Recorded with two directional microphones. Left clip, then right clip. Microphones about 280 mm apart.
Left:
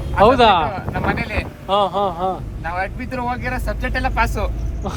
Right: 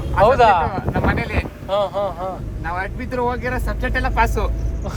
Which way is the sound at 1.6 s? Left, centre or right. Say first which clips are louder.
Left 3 dB; left.